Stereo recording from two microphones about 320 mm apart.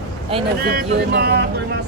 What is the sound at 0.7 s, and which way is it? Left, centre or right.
Speech, right.